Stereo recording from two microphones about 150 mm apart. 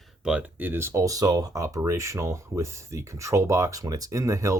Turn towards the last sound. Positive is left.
turn(degrees=-20)  # may be behind; listen again after turning